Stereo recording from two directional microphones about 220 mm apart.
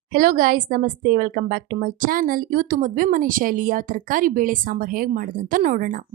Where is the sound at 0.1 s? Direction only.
40° right (ahead or behind).